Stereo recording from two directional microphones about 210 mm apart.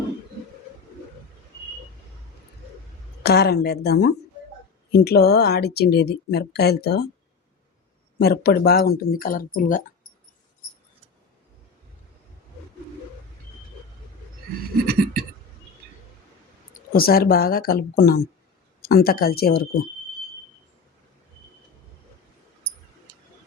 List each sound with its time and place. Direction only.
3.2 s speech: 50° left (ahead or behind)
8.2 s speech: 50° left (ahead or behind)
14.7 s a sound: 45° right (ahead or behind)
16.9 s speech: 45° left (ahead or behind)